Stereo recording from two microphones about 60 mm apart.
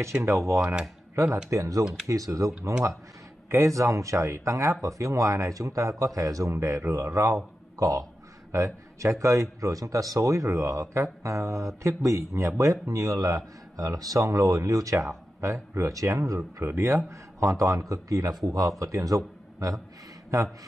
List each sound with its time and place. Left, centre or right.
0.0 s speech: right
1.5 s speech: right
3.4 s a man's voice: right
6.5 s a man's voice: right
7.8 s speech: right
8.5 s a man's voice: right
15.0 s a man's voice: right
16.6 s a man's voice: right
18.4 s speech: right
18.8 s speech: right